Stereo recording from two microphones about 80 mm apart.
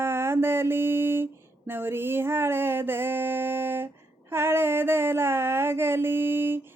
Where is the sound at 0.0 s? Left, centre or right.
Right.